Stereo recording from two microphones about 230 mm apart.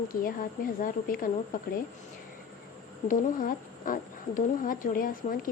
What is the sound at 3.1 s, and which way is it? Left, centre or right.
Speech, left.